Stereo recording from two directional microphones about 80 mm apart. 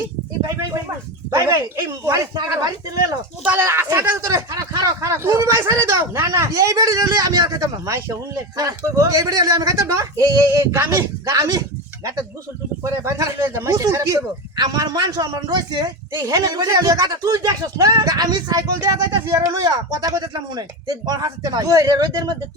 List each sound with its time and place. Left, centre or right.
0.0 s a sound: right
1.3 s speech: right
3.5 s speech: right
12.8 s speech: right
14.5 s a man's voice: right
19.6 s speech: right
20.2 s a man's voice: right